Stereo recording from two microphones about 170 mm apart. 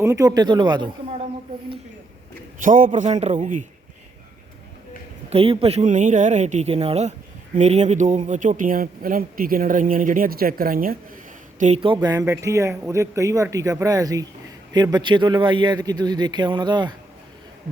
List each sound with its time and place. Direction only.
0.0 s a man's voice: 20° right (ahead or behind)
2.6 s speech: 50° right (ahead or behind)
5.3 s a man's voice: 35° right (ahead or behind); by 10.9 s 55° right (ahead or behind)
11.6 s a man's voice: 35° right (ahead or behind)